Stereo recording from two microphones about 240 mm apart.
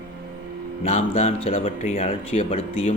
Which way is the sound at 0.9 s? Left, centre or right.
Left.